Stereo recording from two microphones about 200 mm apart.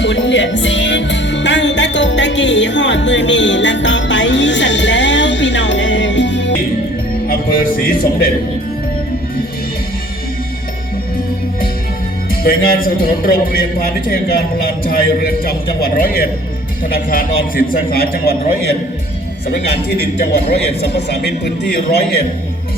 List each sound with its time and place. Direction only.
0.0 s music: 65° left (ahead or behind)
12.3 s a man's voice: 50° left (ahead or behind)